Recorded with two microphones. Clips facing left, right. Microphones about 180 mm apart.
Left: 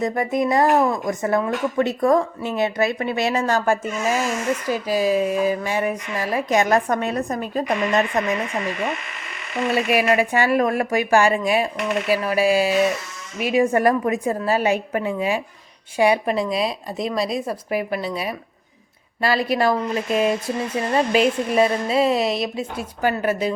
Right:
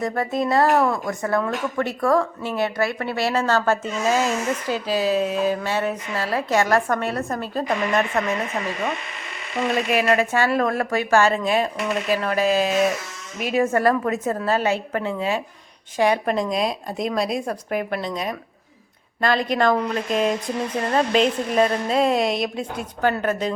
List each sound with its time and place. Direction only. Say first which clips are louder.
0.0 s speech: left 2 dB; 15° left (ahead or behind)
9.7 s speech: left 1 dB; 10° left (ahead or behind)